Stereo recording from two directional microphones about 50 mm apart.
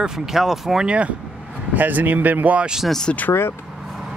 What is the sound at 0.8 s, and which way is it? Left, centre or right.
Speech, right.